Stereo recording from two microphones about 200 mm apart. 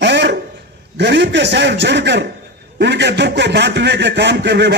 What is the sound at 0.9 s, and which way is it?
A man's voice, 60° right (ahead or behind).